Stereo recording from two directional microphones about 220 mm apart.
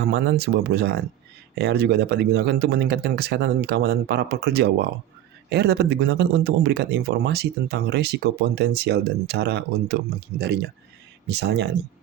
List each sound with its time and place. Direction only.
0.0 s a man's voice: 50° right (ahead or behind)